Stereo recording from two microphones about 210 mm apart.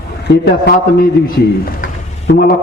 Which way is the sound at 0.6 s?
45° left (ahead or behind).